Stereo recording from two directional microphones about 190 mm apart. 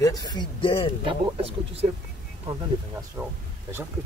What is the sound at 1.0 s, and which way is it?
Speech, 30° right (ahead or behind).